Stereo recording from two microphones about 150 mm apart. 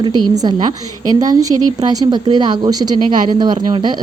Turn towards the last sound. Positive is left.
turn(degrees=-30)  # may be behind; listen again after turning